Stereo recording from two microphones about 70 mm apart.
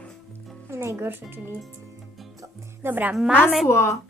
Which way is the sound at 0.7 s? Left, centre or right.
Right.